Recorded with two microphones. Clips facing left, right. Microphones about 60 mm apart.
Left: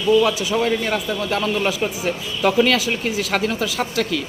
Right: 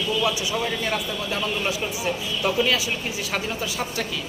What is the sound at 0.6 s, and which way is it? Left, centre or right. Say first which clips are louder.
Speech: left 5 dB; left.